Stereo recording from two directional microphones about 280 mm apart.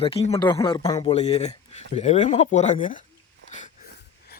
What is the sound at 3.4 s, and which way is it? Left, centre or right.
Wheeze, left.